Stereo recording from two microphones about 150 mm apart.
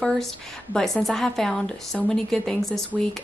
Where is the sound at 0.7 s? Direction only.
5° left (ahead or behind).